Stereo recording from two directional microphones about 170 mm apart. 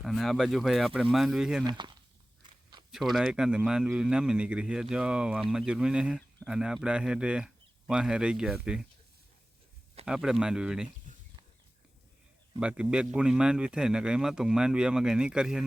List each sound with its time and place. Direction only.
0.0 s speech: centre (ahead or behind)
1.6 s speech: 25° right (ahead or behind)
2.4 s chewing: 25° right (ahead or behind)
2.9 s speech: centre (ahead or behind)
10.1 s speech: 5° right (ahead or behind)
12.5 s speech: 5° right (ahead or behind)